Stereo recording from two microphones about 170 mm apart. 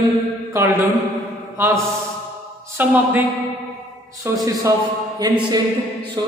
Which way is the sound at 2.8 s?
10° right (ahead or behind).